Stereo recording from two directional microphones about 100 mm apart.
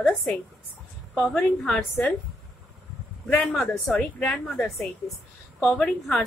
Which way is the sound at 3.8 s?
10° left (ahead or behind).